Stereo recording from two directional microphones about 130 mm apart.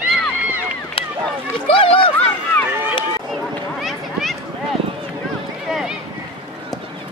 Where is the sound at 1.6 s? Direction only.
45° left (ahead or behind).